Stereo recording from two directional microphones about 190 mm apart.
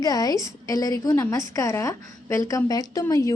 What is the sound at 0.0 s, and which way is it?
A woman's voice, 20° left (ahead or behind).